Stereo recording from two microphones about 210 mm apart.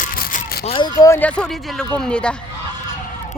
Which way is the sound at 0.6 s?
25° left (ahead or behind).